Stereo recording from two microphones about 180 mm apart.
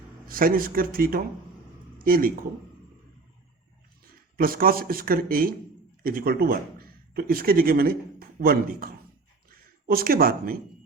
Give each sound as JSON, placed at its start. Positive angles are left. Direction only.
{"t": 0.3, "sound": "a man's voice", "side_deg": -50}
{"t": 4.0, "sound": "speech", "side_deg": -55}